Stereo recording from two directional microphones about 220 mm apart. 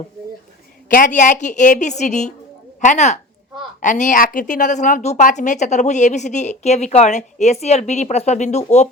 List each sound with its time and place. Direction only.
0.9 s a woman's voice: 40° left (ahead or behind)